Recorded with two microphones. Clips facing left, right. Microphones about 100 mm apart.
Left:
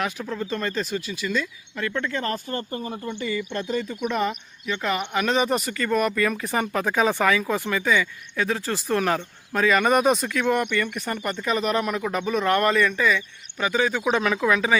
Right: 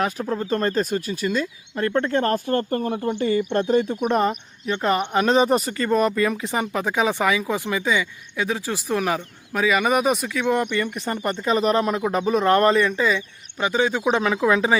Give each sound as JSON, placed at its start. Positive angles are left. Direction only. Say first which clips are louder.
{"t": 0.0, "sound": "speech", "louder": "right 4 dB", "side_deg": -35}
{"t": 10.5, "sound": "speech", "louder": "right 3 dB", "side_deg": -25}